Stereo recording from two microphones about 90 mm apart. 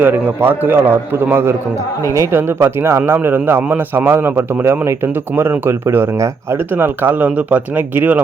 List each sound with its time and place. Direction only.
0.0 s a man's voice: 20° right (ahead or behind)